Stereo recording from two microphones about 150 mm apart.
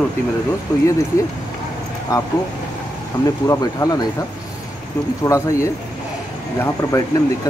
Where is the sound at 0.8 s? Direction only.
20° left (ahead or behind).